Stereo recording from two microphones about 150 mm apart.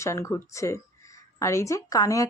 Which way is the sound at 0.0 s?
20° left (ahead or behind).